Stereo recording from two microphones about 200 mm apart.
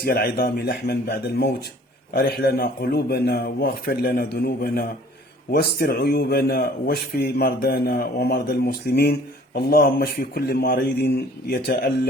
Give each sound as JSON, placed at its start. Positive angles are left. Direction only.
{"t": 0.0, "sound": "a man's voice", "side_deg": 50}